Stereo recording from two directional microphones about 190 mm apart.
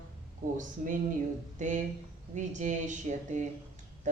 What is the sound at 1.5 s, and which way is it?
Speech, 40° right (ahead or behind).